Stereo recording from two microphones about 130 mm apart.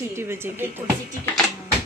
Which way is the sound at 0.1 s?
20° right (ahead or behind).